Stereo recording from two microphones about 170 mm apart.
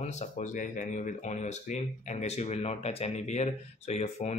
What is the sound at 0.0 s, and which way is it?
Speech, 45° left (ahead or behind).